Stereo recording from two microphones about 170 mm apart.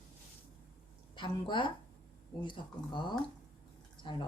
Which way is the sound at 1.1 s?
30° left (ahead or behind).